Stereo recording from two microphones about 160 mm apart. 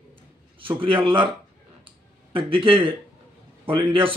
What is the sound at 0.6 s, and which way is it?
Speech, 35° right (ahead or behind).